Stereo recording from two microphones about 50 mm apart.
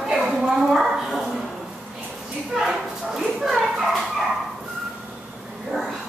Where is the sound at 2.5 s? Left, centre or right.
Centre.